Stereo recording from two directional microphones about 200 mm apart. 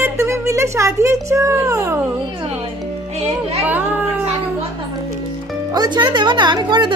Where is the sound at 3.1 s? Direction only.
30° right (ahead or behind).